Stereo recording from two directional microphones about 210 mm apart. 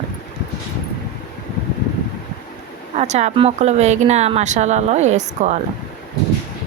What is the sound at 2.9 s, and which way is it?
Speech, 30° right (ahead or behind).